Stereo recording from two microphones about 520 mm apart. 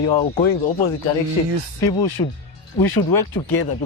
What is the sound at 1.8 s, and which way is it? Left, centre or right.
Speech, left.